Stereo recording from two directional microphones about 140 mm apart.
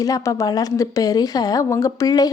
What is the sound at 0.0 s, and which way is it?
A woman's voice, 25° left (ahead or behind).